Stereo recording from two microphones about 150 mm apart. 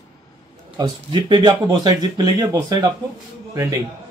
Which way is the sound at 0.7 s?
30° right (ahead or behind).